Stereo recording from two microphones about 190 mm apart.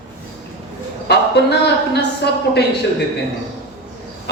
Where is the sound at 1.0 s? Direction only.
60° left (ahead or behind).